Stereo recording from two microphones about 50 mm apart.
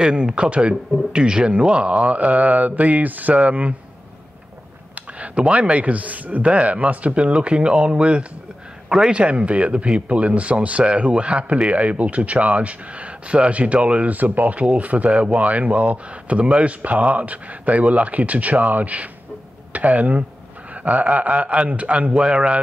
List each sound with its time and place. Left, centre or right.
0.0 s speech: right
5.2 s speech: right
8.8 s a man's voice: centre
9.2 s speech: right